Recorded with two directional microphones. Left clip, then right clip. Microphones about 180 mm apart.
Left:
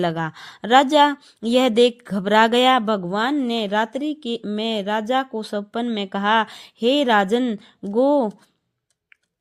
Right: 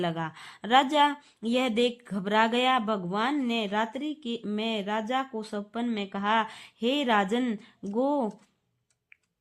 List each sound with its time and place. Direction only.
0.0 s speech: 35° left (ahead or behind)